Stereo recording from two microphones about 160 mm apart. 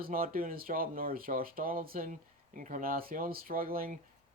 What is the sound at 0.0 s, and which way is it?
Speech, 65° right (ahead or behind).